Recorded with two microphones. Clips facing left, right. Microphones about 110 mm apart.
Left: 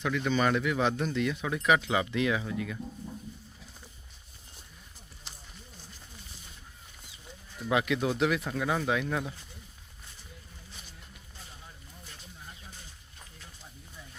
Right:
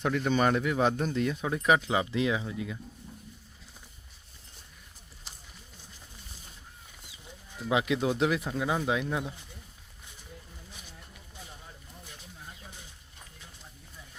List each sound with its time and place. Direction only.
0.0 s speech: 45° right (ahead or behind); by 2.7 s 25° right (ahead or behind)
7.5 s speech: 20° right (ahead or behind)